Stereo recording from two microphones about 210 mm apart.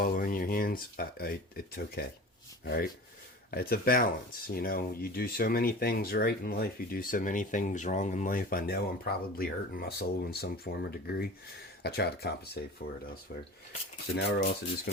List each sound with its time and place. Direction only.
0.0 s speech: 40° left (ahead or behind)
14.2 s speech: 55° left (ahead or behind)